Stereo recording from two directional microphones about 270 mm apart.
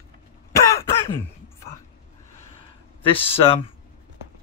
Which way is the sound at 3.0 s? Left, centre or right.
Centre.